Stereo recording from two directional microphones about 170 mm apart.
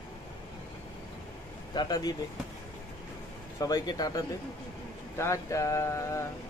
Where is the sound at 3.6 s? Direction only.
20° left (ahead or behind).